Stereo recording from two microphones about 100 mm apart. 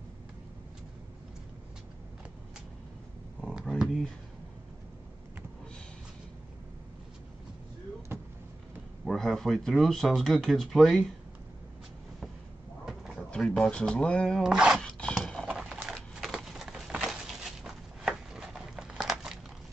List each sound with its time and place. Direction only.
3.3 s a sound: 5° left (ahead or behind)
9.0 s speech: 5° left (ahead or behind)
12.8 s drawer open or close: 5° right (ahead or behind)
13.3 s a sound: 10° left (ahead or behind)
13.7 s speech: 10° left (ahead or behind)
14.4 s speech: 5° right (ahead or behind)
14.8 s dog: 10° left (ahead or behind)
15.1 s clip-clop: 5° left (ahead or behind)
15.4 s a sound: 5° right (ahead or behind)